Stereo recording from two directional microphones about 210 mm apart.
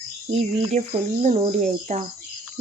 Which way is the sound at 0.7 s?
35° right (ahead or behind).